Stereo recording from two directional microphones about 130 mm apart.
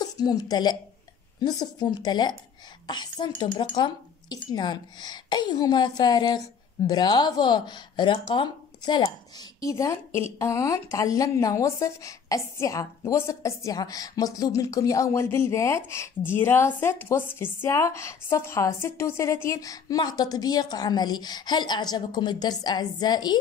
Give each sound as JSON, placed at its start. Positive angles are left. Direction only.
{"t": 0.0, "sound": "a woman's voice", "side_deg": 30}